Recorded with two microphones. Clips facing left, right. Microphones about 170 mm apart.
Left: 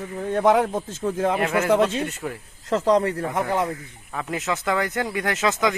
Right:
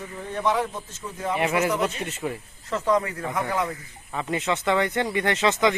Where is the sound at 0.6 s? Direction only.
50° left (ahead or behind); by 1.4 s 70° left (ahead or behind).